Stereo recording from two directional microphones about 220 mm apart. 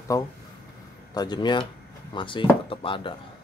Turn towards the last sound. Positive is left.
turn(degrees=25)  # may be behind; listen again after turning